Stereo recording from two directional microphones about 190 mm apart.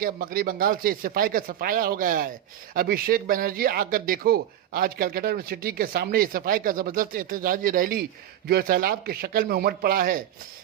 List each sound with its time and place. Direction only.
0.0 s speech: 50° right (ahead or behind)